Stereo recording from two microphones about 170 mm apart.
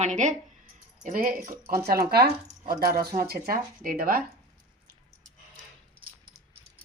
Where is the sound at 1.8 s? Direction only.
65° right (ahead or behind).